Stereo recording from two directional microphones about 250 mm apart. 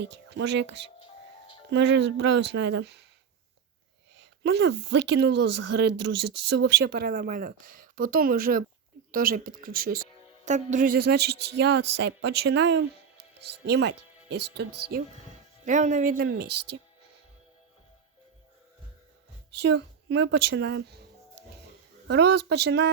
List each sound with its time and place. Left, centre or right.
0.3 s a woman's voice: right
1.0 s music: centre
1.7 s a woman's voice: right
4.2 s a sound: right
4.9 s a woman's voice: right
5.5 s speech: right
6.6 s speech: right
11.3 s speech: right
11.5 s a woman's voice: right
19.6 s a woman's voice: right
22.0 s speech: right